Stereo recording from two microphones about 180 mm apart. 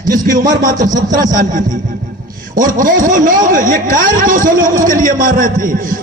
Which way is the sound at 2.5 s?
50° right (ahead or behind).